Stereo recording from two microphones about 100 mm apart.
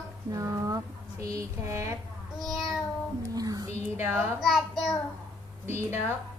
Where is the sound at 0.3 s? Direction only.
35° right (ahead or behind).